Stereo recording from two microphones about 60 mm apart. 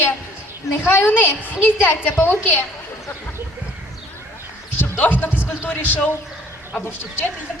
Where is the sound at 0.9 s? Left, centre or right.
Left.